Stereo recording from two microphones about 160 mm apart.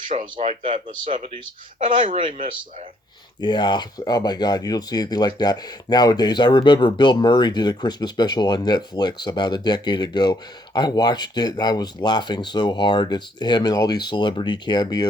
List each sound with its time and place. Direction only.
0.3 s speech: 40° right (ahead or behind)
0.7 s speech: 55° right (ahead or behind)
1.1 s speech: 35° right (ahead or behind)
3.4 s speech: 30° left (ahead or behind)